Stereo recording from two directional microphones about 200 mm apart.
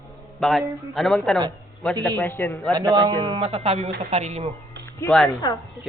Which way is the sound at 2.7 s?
20° right (ahead or behind).